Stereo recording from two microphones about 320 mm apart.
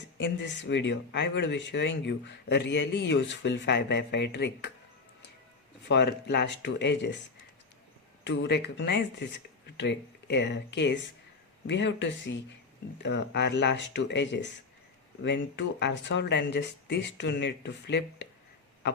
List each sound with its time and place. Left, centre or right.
0.2 s speech: left
5.9 s speech: left
8.2 s speech: left